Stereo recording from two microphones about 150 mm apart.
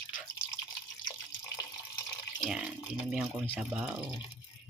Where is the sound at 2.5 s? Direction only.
5° right (ahead or behind).